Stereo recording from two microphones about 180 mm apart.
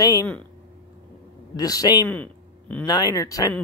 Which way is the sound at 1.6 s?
20° left (ahead or behind).